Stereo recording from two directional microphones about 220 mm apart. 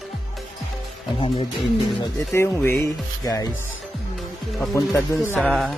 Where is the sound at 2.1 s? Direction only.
10° left (ahead or behind).